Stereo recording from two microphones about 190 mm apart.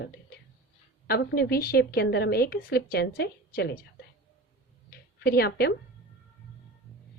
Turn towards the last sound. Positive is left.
turn(degrees=55)  # may be behind; listen again after turning